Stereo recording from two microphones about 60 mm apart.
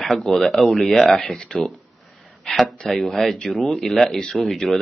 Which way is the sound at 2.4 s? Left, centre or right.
Centre.